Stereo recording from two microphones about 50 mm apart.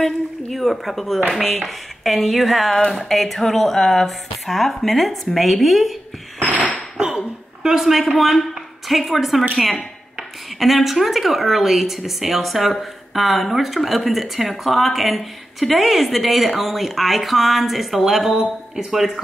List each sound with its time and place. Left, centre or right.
0.0 s speech: centre
6.5 s a sound: left
7.0 s speech: centre